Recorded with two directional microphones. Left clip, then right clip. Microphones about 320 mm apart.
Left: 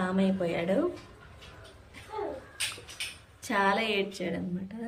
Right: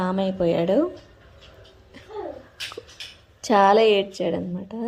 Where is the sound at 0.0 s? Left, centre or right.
Centre.